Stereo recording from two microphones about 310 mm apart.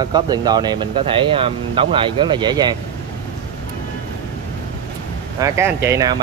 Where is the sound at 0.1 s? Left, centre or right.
Centre.